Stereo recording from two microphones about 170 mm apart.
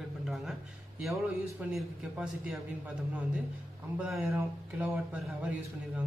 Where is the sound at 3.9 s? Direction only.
Centre (ahead or behind).